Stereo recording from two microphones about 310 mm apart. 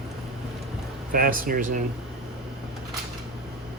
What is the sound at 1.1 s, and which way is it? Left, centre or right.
Speech, right.